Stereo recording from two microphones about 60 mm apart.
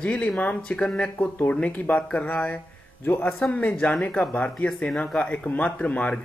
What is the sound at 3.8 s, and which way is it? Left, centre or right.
Speech, left.